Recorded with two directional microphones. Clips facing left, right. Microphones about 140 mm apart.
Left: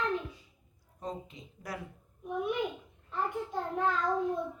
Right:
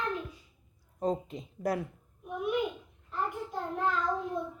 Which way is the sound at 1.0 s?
40° right (ahead or behind).